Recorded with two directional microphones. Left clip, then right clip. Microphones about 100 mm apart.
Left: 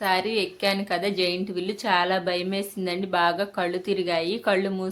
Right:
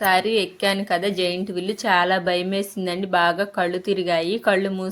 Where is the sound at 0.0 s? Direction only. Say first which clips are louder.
Right 5 dB; 45° right (ahead or behind).